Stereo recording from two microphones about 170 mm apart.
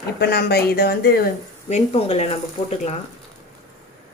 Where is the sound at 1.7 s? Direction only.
40° left (ahead or behind).